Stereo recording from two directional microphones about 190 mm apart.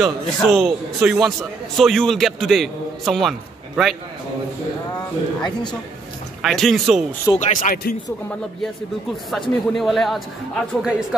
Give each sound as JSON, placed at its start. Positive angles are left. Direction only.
{"t": 0.0, "sound": "a man's voice", "side_deg": 0}
{"t": 6.4, "sound": "a man's voice", "side_deg": 0}
{"t": 7.3, "sound": "speech", "side_deg": 40}
{"t": 9.1, "sound": "a man's voice", "side_deg": 0}